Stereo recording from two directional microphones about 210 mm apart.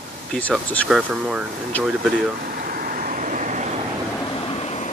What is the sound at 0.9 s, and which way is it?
Speech, 5° right (ahead or behind).